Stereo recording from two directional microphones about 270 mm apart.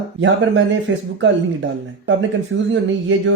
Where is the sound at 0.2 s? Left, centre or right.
Right.